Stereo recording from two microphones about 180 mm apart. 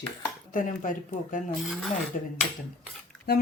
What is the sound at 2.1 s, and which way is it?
Speech, 45° left (ahead or behind).